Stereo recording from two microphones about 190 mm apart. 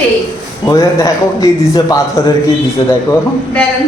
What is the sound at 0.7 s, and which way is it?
A man's voice, 15° left (ahead or behind).